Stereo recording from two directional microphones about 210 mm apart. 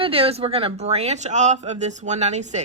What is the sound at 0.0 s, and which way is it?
A woman's voice, 25° right (ahead or behind).